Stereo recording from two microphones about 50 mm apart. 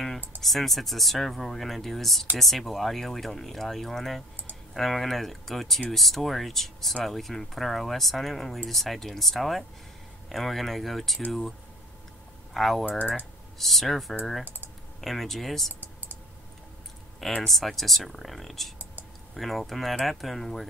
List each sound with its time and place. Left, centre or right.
0.4 s speech: centre
12.5 s speech: centre
13.0 s speech: right
13.6 s speech: centre
14.4 s speech: right
15.0 s speech: centre
15.8 s computer keyboard: right
17.4 s speech: centre